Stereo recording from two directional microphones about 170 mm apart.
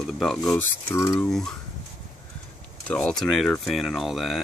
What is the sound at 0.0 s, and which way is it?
Speech, 5° left (ahead or behind).